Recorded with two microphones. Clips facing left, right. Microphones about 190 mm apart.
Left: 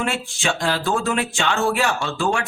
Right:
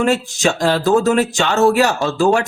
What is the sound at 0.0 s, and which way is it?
Speech, 40° right (ahead or behind).